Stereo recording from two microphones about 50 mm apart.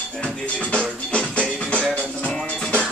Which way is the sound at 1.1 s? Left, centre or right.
Left.